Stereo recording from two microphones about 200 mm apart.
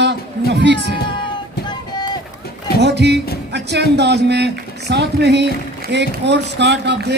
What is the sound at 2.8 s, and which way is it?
Speech, 55° right (ahead or behind).